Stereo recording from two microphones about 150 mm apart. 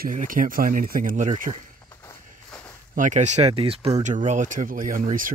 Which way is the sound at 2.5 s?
5° left (ahead or behind).